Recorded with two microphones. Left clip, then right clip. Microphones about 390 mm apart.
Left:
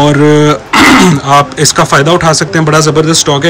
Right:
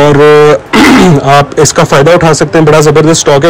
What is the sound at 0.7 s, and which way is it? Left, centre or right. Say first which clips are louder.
Throat clearing: right 1 dB; centre.